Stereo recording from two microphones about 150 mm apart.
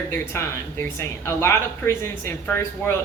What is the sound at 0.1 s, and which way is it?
Speech, 15° left (ahead or behind).